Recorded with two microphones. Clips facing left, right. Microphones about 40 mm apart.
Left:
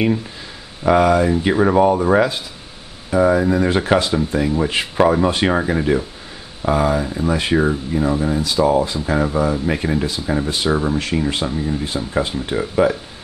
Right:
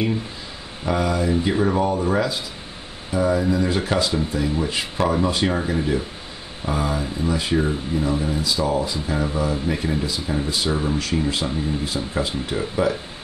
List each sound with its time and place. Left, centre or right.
0.8 s speech: left
7.3 s speech: left
11.4 s speech: centre
11.8 s speech: left
12.5 s speech: left